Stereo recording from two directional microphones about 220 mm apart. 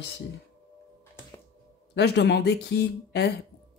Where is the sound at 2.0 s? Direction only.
50° left (ahead or behind).